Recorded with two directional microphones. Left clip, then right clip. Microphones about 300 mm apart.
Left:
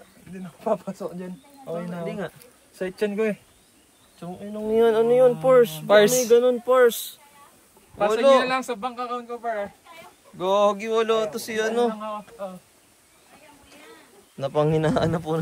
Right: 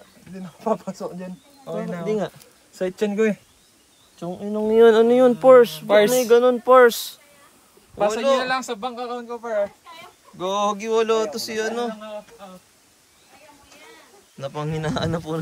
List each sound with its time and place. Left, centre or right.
0.7 s speech: right
4.6 s speech: right
5.7 s speech: centre
6.2 s speech: right
8.1 s speech: centre
8.5 s speech: centre
10.3 s speech: centre
14.4 s speech: centre